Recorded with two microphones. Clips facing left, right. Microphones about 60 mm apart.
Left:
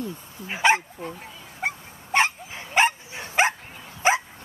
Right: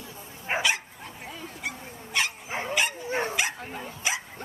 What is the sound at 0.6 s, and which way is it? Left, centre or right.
Dog, left.